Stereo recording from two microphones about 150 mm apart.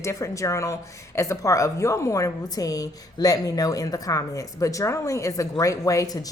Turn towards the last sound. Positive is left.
turn(degrees=25)  # may be behind; listen again after turning